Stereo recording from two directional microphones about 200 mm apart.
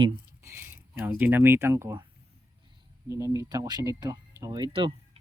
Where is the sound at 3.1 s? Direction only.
15° right (ahead or behind).